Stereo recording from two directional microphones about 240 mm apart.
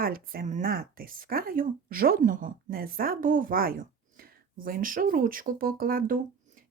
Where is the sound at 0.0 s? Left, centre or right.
Right.